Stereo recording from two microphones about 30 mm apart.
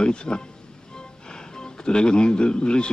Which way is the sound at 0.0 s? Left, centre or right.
Left.